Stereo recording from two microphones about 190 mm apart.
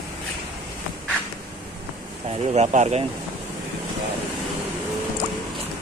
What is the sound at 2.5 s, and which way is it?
Speech, 35° right (ahead or behind).